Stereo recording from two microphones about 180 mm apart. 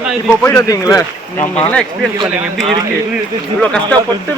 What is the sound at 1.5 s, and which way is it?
Speech, 5° left (ahead or behind).